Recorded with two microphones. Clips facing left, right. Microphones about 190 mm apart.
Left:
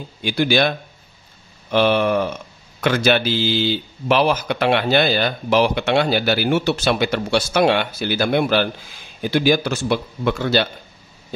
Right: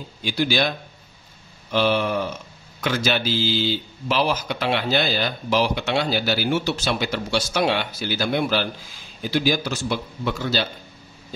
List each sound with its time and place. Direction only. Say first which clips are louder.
0.2 s speech: left 4 dB; 60° left (ahead or behind)